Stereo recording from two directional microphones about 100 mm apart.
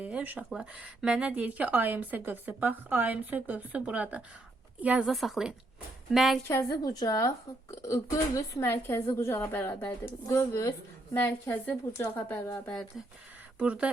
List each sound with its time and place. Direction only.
0.0 s speech: 15° right (ahead or behind)
5.0 s a woman's voice: centre (ahead or behind)
6.5 s a woman's voice: 30° left (ahead or behind)
6.8 s a woman's voice: 40° left (ahead or behind)
8.6 s a woman's voice: 25° left (ahead or behind)
13.6 s speech: 10° right (ahead or behind)